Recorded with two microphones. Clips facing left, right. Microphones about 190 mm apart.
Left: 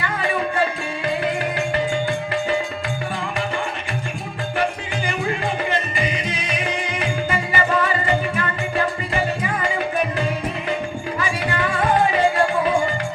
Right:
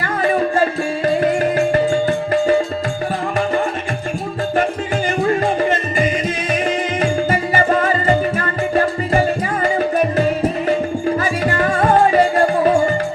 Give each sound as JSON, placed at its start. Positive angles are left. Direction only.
{"t": 0.0, "sound": "music", "side_deg": -40}
{"t": 5.0, "sound": "music", "side_deg": -40}